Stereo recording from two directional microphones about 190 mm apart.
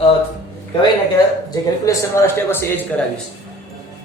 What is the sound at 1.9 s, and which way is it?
Speech, 15° left (ahead or behind).